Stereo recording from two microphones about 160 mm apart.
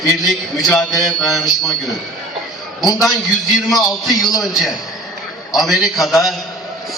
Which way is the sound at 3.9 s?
Centre (ahead or behind).